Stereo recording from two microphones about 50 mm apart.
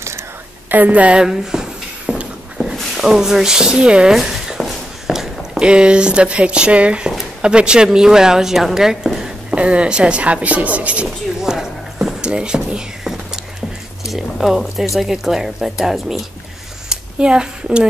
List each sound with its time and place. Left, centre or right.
0.7 s a woman's voice: right
1.1 s a sound: centre
2.6 s speech: centre
4.1 s walk: centre; by 7.1 s right
7.1 s speech: centre
9.6 s speech: right
11.4 s music: centre
14.0 s speech: centre
16.9 s a woman's voice: centre